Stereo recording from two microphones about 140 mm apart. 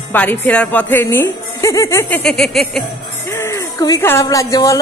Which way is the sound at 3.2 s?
20° left (ahead or behind).